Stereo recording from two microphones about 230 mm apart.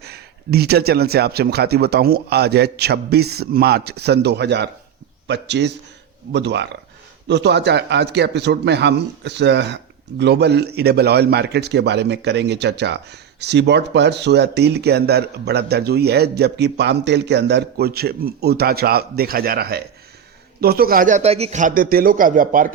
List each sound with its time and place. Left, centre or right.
0.0 s a man's voice: right